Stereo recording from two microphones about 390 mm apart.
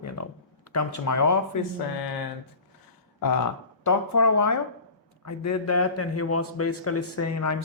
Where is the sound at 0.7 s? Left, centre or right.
Left.